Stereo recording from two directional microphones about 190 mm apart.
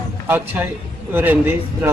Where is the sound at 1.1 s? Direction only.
10° right (ahead or behind).